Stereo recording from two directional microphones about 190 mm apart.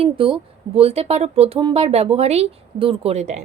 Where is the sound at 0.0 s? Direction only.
30° right (ahead or behind).